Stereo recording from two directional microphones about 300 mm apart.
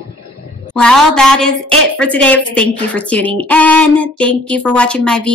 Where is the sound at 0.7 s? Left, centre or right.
Centre.